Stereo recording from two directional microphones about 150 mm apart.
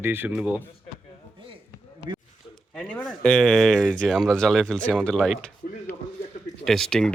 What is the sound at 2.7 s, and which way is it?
Speech, 5° left (ahead or behind).